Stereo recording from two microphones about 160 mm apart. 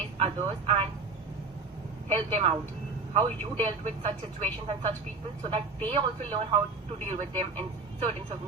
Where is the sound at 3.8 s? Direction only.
40° right (ahead or behind).